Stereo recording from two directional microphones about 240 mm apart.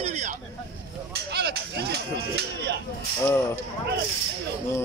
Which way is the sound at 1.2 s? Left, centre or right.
Right.